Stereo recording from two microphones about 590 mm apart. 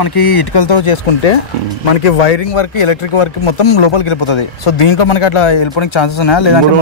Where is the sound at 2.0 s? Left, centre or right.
Left.